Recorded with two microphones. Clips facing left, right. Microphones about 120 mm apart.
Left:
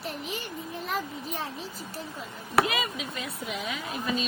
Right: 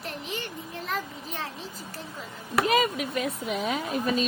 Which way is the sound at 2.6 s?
45° right (ahead or behind).